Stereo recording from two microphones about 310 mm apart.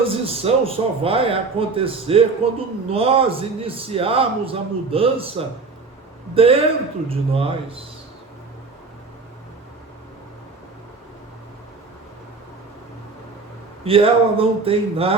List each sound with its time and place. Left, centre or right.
0.0 s a man's voice: centre
6.3 s a man's voice: centre
13.8 s a man's voice: centre